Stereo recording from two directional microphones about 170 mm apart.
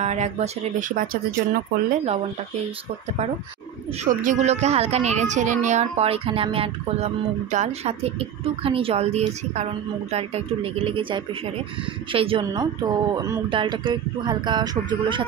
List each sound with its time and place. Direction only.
0.0 s speech: 40° right (ahead or behind)
4.0 s a child's voice: 50° right (ahead or behind); by 15.2 s 25° right (ahead or behind)